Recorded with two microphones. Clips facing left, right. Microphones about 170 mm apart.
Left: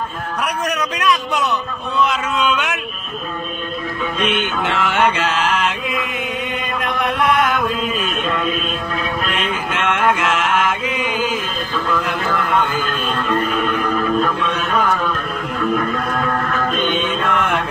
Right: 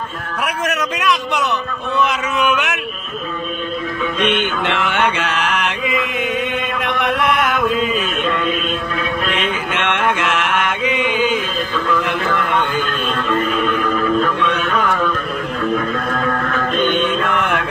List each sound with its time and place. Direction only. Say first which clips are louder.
0.9 s speech: even; centre (ahead or behind)
5.1 s mantra: left 1 dB; 60° right (ahead or behind)
5.9 s chant: right 3 dB; centre (ahead or behind)
9.3 s mantra: right 1 dB; centre (ahead or behind)
11.1 s chant: right 3 dB; centre (ahead or behind)
12.3 s speech: left 3 dB; centre (ahead or behind)